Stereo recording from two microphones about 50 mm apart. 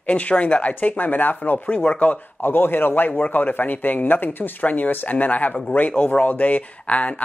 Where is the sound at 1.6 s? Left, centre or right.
Left.